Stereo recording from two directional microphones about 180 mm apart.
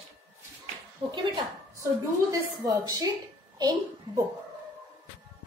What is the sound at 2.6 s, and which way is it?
A woman's voice, 20° right (ahead or behind).